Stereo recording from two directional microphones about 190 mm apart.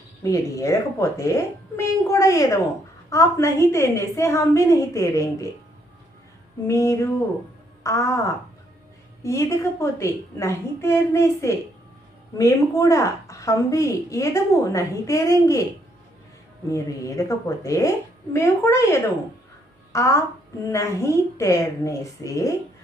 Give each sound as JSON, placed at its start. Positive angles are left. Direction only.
{"t": 0.2, "sound": "a woman's voice", "side_deg": 15}
{"t": 6.7, "sound": "a woman's voice", "side_deg": 15}
{"t": 9.2, "sound": "a woman's voice", "side_deg": 15}
{"t": 16.7, "sound": "a woman's voice", "side_deg": 15}